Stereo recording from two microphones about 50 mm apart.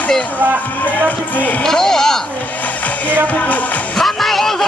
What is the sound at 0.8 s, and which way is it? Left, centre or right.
Speech, left.